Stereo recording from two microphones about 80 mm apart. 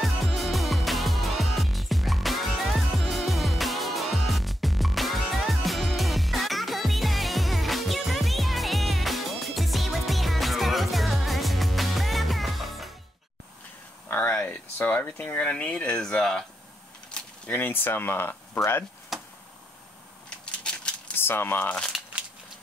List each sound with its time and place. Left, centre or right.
0.0 s music: centre
14.0 s a sound: left
16.0 s speech: centre
17.1 s speech: left
20.2 s a sound: centre
21.2 s speech: left